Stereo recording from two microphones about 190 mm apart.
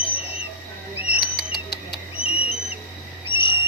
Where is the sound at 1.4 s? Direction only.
20° left (ahead or behind).